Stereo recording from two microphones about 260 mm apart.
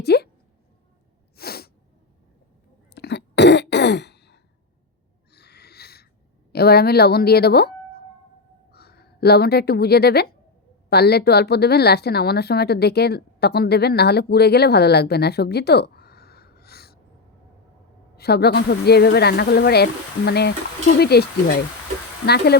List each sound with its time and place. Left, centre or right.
0.0 s a sound: left
1.4 s sneeze: left
2.9 s throat clearing: left
5.3 s a sound: left
6.5 s a woman's voice: left
18.2 s a woman's voice: left